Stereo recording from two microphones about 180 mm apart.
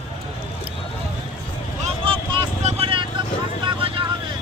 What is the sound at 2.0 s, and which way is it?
Vehicle, 35° right (ahead or behind).